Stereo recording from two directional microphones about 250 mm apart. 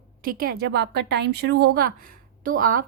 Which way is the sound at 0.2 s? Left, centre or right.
Right.